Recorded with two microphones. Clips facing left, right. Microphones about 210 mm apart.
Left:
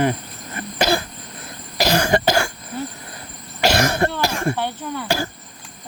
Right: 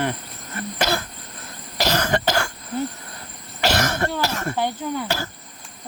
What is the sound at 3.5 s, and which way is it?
Cough, 15° left (ahead or behind).